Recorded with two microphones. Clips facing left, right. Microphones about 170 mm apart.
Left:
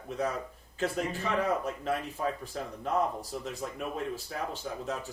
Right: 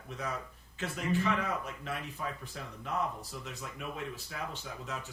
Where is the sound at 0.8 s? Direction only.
40° left (ahead or behind).